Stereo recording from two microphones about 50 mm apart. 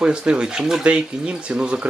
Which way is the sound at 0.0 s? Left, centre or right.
Centre.